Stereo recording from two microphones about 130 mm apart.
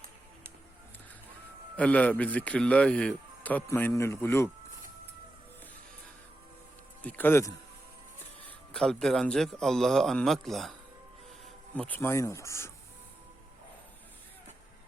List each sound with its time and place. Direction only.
1.7 s speech: 10° left (ahead or behind)
7.0 s speech: 15° left (ahead or behind)
8.4 s speech: 5° left (ahead or behind)
11.7 s speech: 10° left (ahead or behind)